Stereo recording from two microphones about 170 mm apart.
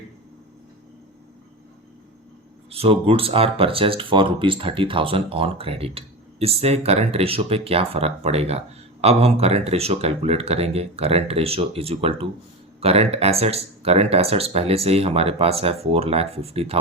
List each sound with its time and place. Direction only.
2.6 s speech: 35° right (ahead or behind)